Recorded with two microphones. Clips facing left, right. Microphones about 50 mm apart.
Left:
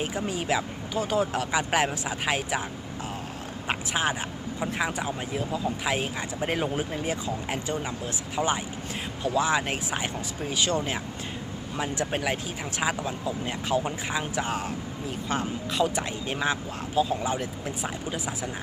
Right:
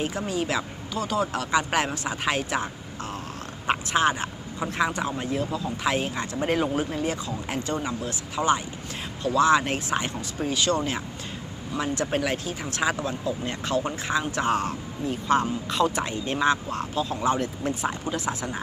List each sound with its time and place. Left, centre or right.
0.3 s speech: centre
3.7 s speech: centre
11.8 s speech: centre